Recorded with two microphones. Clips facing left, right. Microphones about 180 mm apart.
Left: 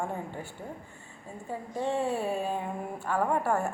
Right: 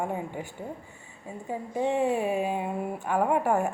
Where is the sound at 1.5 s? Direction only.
15° right (ahead or behind).